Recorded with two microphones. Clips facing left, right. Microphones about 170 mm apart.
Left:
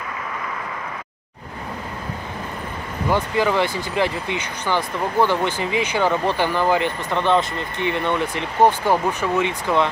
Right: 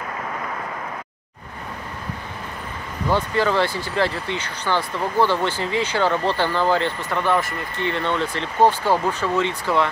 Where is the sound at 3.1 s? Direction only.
15° left (ahead or behind).